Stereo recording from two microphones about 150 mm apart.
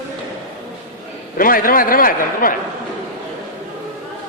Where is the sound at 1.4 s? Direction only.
70° left (ahead or behind).